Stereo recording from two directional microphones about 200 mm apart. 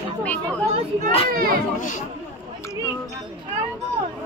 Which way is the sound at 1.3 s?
45° right (ahead or behind).